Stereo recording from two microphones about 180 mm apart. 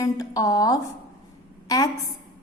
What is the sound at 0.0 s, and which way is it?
Speech, 20° left (ahead or behind).